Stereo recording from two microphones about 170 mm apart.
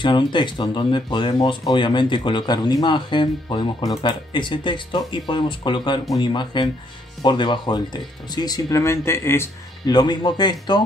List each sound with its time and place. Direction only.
0.0 s speech: 30° left (ahead or behind)